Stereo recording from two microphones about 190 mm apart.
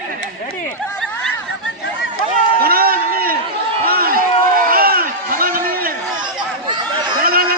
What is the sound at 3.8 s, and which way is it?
Run, 50° right (ahead or behind).